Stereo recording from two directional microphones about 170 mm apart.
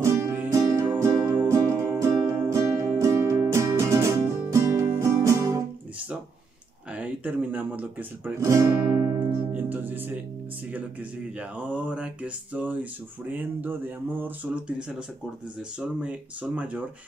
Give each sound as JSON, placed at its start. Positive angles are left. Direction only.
{"t": 0.0, "sound": "music", "side_deg": -15}
{"t": 6.9, "sound": "guitar", "side_deg": -10}
{"t": 10.7, "sound": "speech", "side_deg": -10}